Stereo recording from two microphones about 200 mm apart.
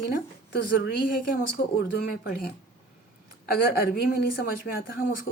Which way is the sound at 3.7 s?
50° left (ahead or behind).